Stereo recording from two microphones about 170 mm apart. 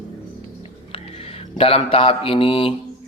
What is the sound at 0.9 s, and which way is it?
Speech, 35° left (ahead or behind).